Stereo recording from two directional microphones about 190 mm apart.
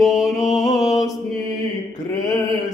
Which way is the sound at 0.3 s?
Centre (ahead or behind).